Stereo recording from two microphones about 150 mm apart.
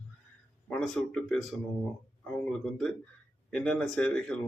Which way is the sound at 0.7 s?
Centre (ahead or behind).